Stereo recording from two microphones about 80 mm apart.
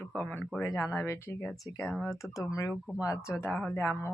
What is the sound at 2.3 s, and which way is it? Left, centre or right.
Speech, left.